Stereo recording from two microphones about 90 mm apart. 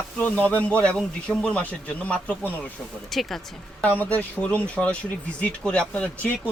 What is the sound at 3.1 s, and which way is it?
Speech, centre (ahead or behind).